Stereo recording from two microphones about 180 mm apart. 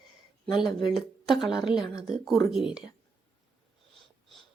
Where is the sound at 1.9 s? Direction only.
Centre (ahead or behind).